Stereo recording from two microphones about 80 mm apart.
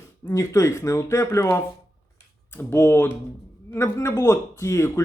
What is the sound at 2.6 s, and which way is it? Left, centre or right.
Speech, left.